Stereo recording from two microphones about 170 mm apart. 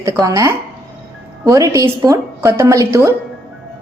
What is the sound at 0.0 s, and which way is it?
A woman's voice, 20° right (ahead or behind).